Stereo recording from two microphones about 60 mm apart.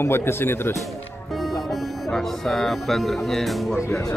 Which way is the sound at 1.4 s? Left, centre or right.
Centre.